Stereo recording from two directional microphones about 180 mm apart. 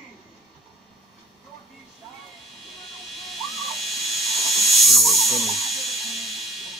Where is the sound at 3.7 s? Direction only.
Centre (ahead or behind).